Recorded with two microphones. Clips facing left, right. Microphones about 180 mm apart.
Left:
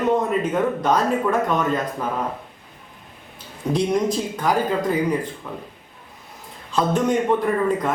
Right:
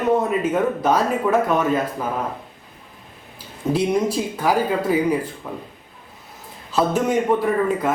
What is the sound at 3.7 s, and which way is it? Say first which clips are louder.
Speech: even; 5° right (ahead or behind).